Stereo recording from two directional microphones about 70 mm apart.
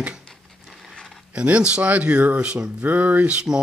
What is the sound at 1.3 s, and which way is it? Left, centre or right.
Speech, centre.